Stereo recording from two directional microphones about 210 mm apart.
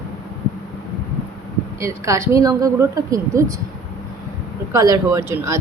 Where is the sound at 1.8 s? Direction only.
15° right (ahead or behind).